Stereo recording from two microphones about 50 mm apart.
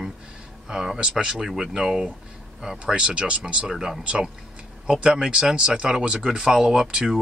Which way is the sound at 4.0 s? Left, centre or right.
Right.